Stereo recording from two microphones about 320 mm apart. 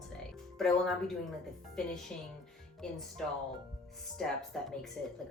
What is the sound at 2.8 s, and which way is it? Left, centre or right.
Speech, centre.